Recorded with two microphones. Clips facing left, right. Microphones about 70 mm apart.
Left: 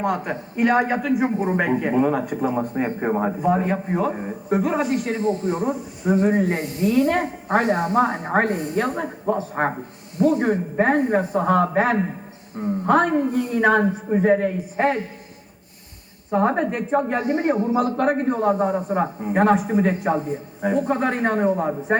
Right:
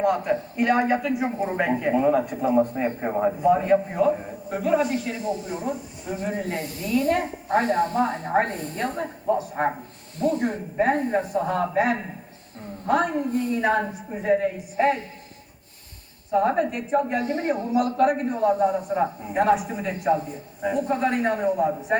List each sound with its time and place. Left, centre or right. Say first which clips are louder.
0.0 s a man's voice: right 2 dB; left
6.6 s a man's voice: left 5 dB; left
7.6 s a man's voice: left 3 dB; left
8.3 s a woman's voice: left 3 dB; left
10.2 s a man's voice: left 4 dB; left
12.5 s a woman's voice: left 5 dB; left
14.2 s a man's voice: left 3 dB; left
14.8 s a man's voice: left 1 dB; left
16.3 s a man's voice: left 1 dB; left
17.9 s a man's voice: left 1 dB; left